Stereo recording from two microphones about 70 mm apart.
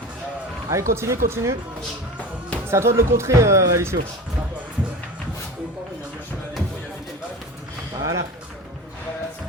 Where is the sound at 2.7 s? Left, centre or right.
Right.